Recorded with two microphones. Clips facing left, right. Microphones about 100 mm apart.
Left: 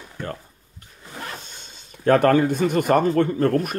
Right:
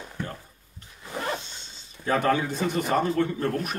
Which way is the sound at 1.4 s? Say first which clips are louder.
Left 2 dB; 50° left (ahead or behind).